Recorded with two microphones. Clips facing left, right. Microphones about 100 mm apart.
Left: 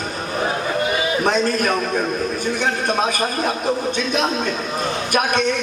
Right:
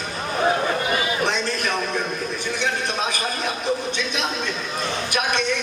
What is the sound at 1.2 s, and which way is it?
Speech, 45° left (ahead or behind).